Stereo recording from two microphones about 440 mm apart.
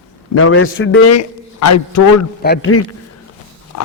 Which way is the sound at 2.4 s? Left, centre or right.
Left.